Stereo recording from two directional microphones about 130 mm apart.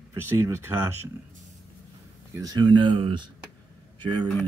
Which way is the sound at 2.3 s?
30° right (ahead or behind).